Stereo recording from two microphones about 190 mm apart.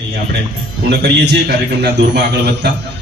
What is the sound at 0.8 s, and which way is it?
A man's voice, 60° right (ahead or behind).